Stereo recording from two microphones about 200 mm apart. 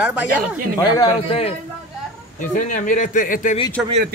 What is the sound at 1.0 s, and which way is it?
Speech, 30° left (ahead or behind).